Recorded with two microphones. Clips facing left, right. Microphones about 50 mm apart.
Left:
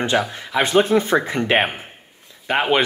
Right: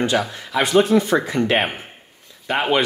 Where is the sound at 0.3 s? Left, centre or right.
Left.